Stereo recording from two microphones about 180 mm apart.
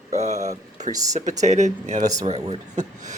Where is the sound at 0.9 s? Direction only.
20° right (ahead or behind).